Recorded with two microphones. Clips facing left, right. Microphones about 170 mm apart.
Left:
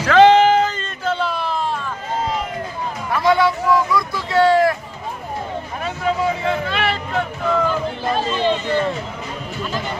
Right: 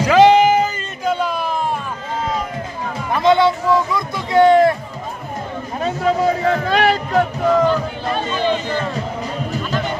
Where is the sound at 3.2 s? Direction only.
25° right (ahead or behind).